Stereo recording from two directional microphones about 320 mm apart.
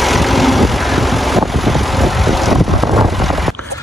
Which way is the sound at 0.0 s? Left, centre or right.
Centre.